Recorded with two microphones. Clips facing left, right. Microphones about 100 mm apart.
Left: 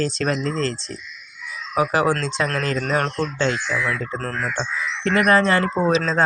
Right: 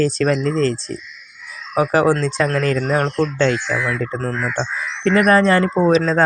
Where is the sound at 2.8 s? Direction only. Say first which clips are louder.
Right 4 dB; 30° right (ahead or behind).